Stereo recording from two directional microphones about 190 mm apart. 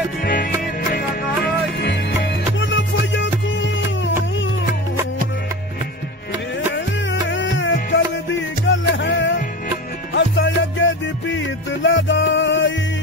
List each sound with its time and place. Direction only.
0.2 s music: 50° left (ahead or behind)
0.9 s music: 60° left (ahead or behind); by 4.5 s 80° left
6.7 s music: 75° left (ahead or behind)